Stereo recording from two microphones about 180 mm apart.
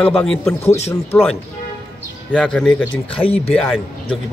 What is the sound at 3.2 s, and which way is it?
Speech, 35° left (ahead or behind).